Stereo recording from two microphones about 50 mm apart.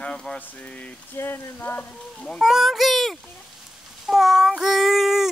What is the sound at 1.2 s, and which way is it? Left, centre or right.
Speech, left.